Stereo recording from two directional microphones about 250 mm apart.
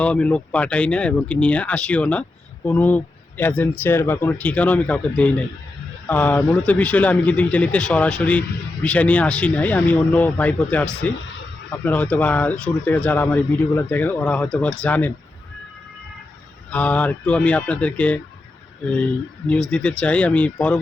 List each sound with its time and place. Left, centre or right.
0.0 s a man's voice: centre
11.9 s speech: centre
16.7 s a man's voice: centre
19.7 s a man's voice: centre